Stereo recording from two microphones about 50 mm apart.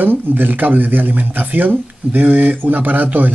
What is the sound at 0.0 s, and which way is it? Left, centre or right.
Speech, right.